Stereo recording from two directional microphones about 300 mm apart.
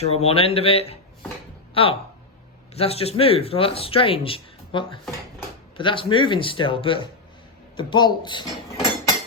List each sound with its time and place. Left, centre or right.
0.0 s speech: left